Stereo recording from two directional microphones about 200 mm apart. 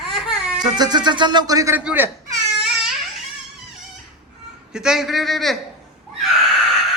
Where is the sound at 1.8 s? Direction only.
10° right (ahead or behind).